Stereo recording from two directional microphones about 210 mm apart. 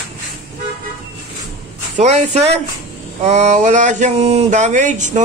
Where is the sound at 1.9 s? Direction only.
35° right (ahead or behind).